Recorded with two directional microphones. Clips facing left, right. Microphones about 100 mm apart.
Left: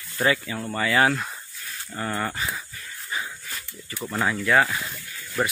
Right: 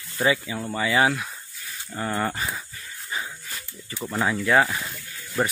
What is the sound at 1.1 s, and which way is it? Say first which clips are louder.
Speech: left 2 dB; centre (ahead or behind).